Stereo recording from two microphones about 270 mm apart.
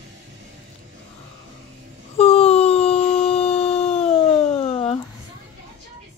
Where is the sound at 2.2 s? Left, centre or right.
Left.